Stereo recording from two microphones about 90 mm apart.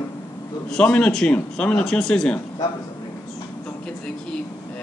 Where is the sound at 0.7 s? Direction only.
10° left (ahead or behind).